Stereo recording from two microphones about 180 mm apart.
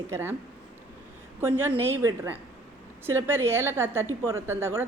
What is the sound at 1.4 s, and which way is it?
A woman's voice, 10° right (ahead or behind).